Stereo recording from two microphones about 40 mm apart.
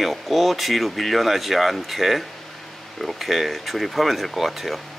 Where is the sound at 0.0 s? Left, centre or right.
Centre.